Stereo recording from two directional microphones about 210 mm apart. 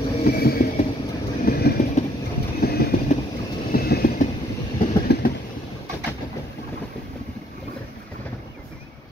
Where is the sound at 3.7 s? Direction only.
45° left (ahead or behind).